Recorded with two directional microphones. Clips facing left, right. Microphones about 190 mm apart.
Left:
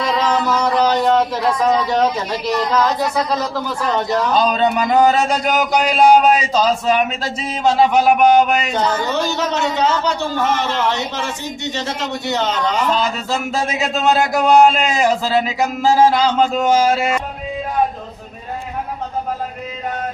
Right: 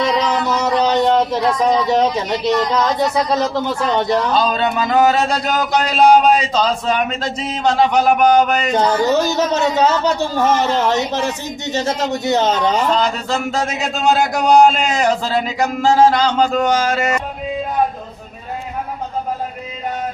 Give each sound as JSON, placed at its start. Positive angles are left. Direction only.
{"t": 0.1, "sound": "a sound", "side_deg": -20}
{"t": 2.1, "sound": "a man's voice", "side_deg": -25}
{"t": 4.4, "sound": "a man's voice", "side_deg": 15}
{"t": 8.7, "sound": "speech", "side_deg": -40}
{"t": 13.0, "sound": "a man's voice", "side_deg": 5}